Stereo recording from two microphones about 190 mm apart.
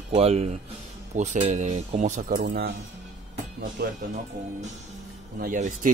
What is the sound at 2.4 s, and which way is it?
Speech, 60° right (ahead or behind).